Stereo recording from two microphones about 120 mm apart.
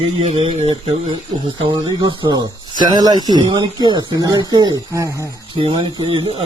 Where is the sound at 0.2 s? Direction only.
65° right (ahead or behind).